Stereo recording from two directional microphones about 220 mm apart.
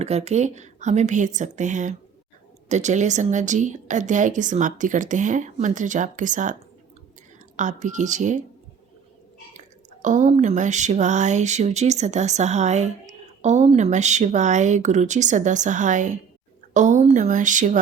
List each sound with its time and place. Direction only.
0.0 s speech: 30° right (ahead or behind)
9.5 s speech: 35° right (ahead or behind)